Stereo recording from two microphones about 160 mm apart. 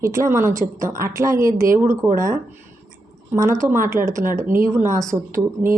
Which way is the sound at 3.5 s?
15° right (ahead or behind).